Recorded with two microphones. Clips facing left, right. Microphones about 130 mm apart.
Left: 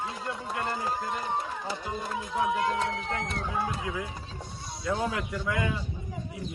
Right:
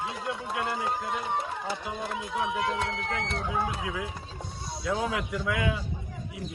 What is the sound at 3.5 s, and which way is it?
A man's voice, 5° right (ahead or behind).